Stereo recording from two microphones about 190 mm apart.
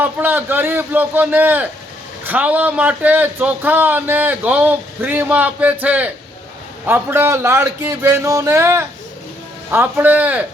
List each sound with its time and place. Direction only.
0.0 s a man's voice: 10° right (ahead or behind)